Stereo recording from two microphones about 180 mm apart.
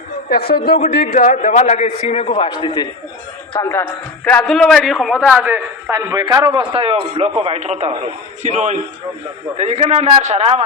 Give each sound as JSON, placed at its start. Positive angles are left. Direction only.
{"t": 0.3, "sound": "a man's voice", "side_deg": 60}
{"t": 3.5, "sound": "speech", "side_deg": 15}
{"t": 4.3, "sound": "a man's voice", "side_deg": 5}